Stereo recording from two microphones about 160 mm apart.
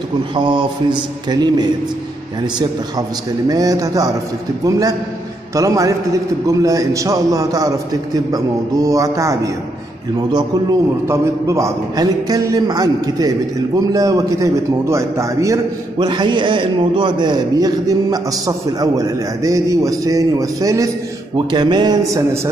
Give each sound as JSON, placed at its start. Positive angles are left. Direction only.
{"t": 0.4, "sound": "a man's voice", "side_deg": -30}
{"t": 3.4, "sound": "a man's voice", "side_deg": -20}